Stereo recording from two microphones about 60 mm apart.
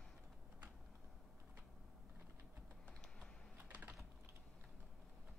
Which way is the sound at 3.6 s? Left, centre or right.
Right.